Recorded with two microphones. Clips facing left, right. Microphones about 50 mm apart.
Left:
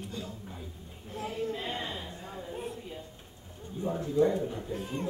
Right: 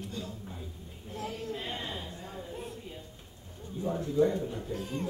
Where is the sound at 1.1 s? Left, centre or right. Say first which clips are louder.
Left 3 dB; left.